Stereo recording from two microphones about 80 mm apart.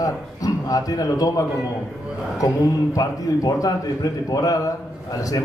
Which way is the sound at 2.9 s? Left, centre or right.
Left.